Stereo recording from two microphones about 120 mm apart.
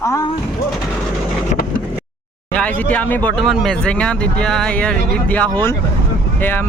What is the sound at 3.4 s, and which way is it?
Speech, centre (ahead or behind).